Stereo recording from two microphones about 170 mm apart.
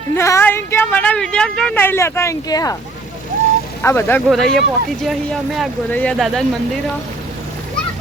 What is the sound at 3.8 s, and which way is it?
Speech, 15° left (ahead or behind).